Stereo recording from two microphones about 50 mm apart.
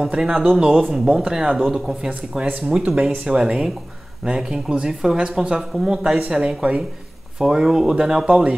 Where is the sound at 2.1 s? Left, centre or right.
Right.